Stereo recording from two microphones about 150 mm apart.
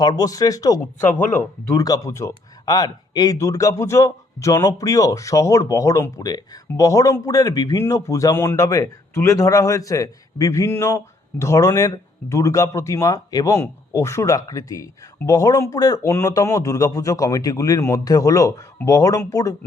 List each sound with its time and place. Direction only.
0.0 s a man's voice: 25° left (ahead or behind)